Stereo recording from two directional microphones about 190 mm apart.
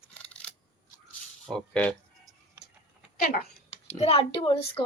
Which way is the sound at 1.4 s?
5° left (ahead or behind).